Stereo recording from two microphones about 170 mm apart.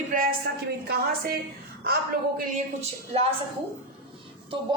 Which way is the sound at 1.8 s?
65° right (ahead or behind).